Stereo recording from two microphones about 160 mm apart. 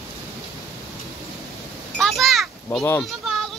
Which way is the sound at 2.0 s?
Centre (ahead or behind).